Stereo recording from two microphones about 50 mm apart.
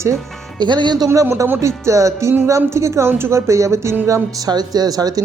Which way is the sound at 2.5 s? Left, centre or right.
Right.